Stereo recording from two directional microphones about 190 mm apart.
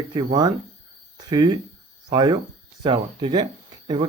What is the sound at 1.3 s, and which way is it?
Speech, 20° right (ahead or behind).